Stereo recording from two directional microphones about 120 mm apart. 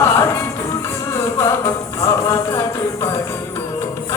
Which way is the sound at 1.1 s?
25° left (ahead or behind).